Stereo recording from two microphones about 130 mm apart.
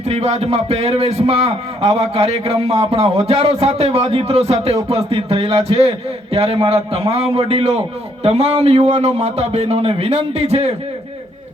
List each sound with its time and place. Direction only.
0.0 s a man's voice: 55° right (ahead or behind)